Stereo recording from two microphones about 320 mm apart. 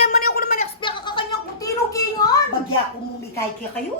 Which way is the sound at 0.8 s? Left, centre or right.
Centre.